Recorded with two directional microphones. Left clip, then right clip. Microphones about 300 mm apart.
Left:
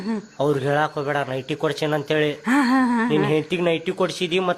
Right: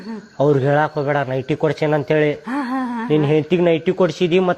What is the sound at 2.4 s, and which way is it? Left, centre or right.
Speech, left.